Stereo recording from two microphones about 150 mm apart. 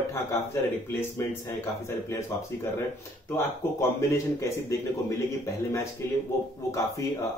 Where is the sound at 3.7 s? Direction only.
20° left (ahead or behind).